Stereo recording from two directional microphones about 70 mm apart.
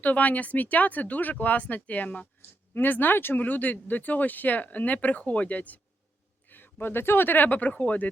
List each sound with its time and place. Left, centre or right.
0.0 s speech: left